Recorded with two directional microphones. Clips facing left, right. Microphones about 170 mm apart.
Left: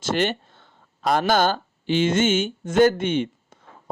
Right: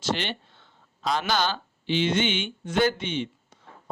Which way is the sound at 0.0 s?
50° left (ahead or behind).